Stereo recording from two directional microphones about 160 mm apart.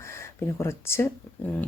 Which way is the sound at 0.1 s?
15° left (ahead or behind).